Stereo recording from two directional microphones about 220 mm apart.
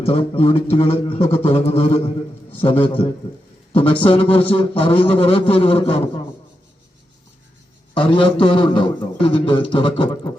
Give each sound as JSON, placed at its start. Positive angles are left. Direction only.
{"t": 0.0, "sound": "a man's voice", "side_deg": 25}
{"t": 8.0, "sound": "a man's voice", "side_deg": 25}